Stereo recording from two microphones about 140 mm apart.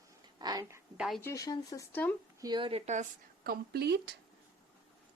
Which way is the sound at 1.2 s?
20° left (ahead or behind).